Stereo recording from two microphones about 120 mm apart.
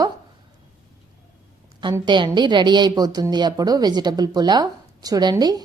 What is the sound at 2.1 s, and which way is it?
A woman's voice, 40° right (ahead or behind).